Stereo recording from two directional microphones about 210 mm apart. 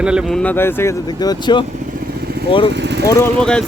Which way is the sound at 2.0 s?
45° right (ahead or behind).